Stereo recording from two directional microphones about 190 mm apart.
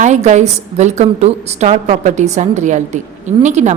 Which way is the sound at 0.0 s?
40° right (ahead or behind).